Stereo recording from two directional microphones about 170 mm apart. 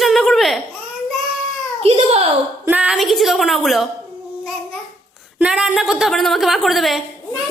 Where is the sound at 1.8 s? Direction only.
35° right (ahead or behind).